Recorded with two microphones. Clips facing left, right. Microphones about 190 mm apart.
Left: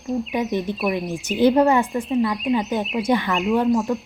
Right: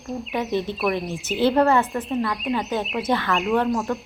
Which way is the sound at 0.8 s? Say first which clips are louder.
Left 1 dB; centre (ahead or behind).